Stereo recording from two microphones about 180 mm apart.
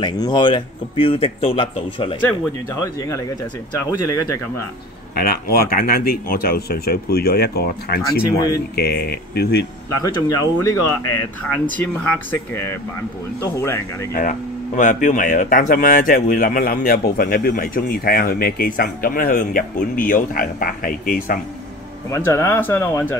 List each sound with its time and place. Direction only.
0.0 s speech: 25° left (ahead or behind)
2.2 s speech: 15° left (ahead or behind)
5.1 s speech: 55° left (ahead or behind)
10.0 s speech: 20° left (ahead or behind)
14.8 s speech: 45° left (ahead or behind)
22.1 s speech: 15° left (ahead or behind)